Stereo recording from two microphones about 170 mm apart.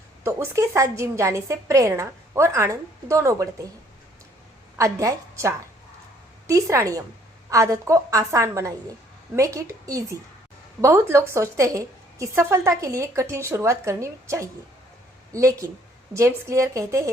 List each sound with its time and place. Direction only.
0.3 s a woman's voice: 15° right (ahead or behind)
4.8 s a woman's voice: 20° right (ahead or behind)